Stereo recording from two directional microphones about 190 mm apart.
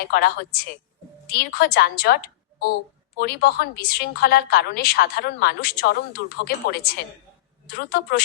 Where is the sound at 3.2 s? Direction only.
55° left (ahead or behind).